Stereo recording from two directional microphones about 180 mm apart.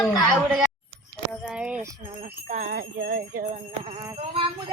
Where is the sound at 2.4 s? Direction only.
45° right (ahead or behind).